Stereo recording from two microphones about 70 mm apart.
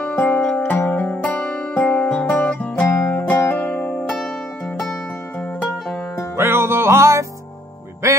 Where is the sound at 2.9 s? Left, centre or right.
Left.